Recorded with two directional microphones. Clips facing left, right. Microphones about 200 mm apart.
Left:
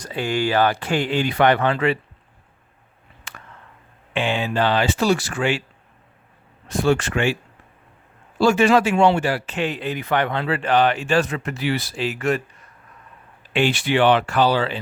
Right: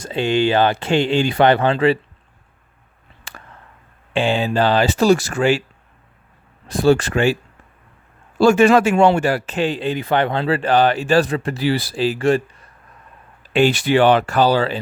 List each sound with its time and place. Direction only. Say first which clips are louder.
0.0 s speech: right 5 dB; 25° right (ahead or behind)
3.3 s a sound: right 2 dB; 35° right (ahead or behind)
4.1 s speech: right 4 dB; 30° right (ahead or behind)
6.7 s speech: right 4 dB; 35° right (ahead or behind)
8.4 s speech: right 4 dB; 50° right (ahead or behind)